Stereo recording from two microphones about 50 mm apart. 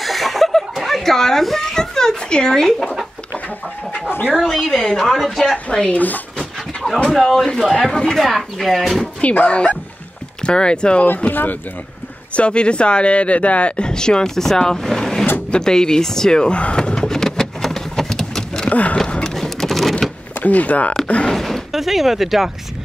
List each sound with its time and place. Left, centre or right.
0.0 s chuckle: centre
4.4 s a woman's voice: centre
5.9 s speech: left
7.1 s a woman's voice: centre
9.0 s speech: left
11.2 s speech: left
12.4 s speech: left
15.5 s door: centre
18.7 s a sound: left
19.3 s vehicle: centre
20.3 s speech: left
21.3 s speech: centre